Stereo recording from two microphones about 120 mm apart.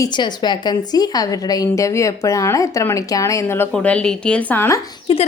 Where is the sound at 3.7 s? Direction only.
10° left (ahead or behind).